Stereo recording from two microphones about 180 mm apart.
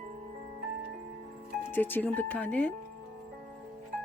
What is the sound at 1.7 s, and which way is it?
Speech, 10° left (ahead or behind).